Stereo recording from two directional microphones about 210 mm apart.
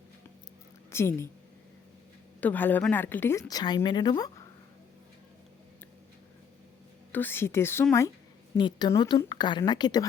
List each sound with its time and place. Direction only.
0.9 s a woman's voice: 10° left (ahead or behind)
2.4 s speech: 10° left (ahead or behind)
7.1 s a woman's voice: 10° left (ahead or behind)